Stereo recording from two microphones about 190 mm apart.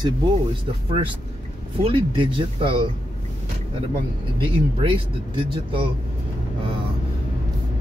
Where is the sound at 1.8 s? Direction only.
30° right (ahead or behind).